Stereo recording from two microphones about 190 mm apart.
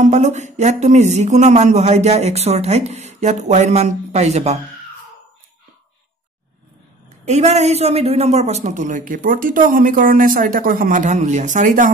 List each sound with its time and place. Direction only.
0.0 s speech: 40° right (ahead or behind)
7.2 s a woman's voice: 35° right (ahead or behind)